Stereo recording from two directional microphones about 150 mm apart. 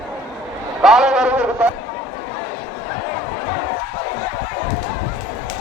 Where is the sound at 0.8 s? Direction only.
5° right (ahead or behind).